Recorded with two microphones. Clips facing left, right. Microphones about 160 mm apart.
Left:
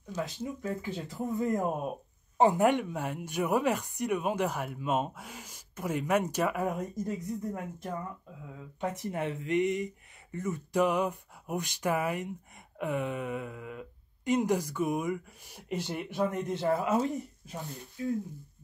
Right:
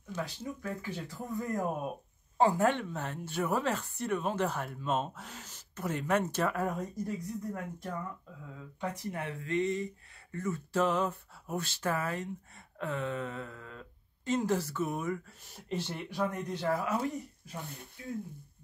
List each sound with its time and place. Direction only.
0.1 s speech: 15° left (ahead or behind)